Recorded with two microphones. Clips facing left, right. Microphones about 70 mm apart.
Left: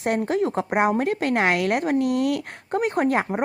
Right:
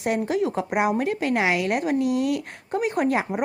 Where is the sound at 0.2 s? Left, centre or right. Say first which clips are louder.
Left 1 dB; left.